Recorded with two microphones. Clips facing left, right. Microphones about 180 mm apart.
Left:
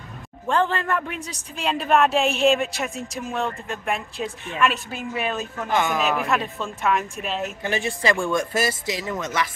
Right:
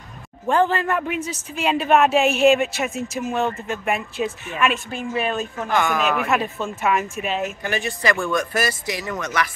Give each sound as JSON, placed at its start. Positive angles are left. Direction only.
{"t": 0.5, "sound": "speech", "side_deg": -5}
{"t": 5.7, "sound": "speech", "side_deg": 20}
{"t": 5.9, "sound": "speech", "side_deg": 0}
{"t": 7.6, "sound": "speech", "side_deg": 25}